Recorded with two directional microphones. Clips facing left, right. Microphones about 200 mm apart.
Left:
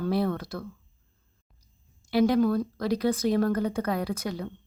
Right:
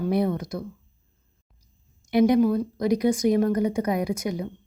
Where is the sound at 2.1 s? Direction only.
20° right (ahead or behind).